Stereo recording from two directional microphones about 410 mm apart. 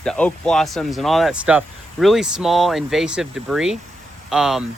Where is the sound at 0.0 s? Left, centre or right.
Centre.